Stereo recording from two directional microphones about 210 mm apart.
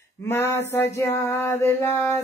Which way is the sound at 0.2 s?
10° left (ahead or behind).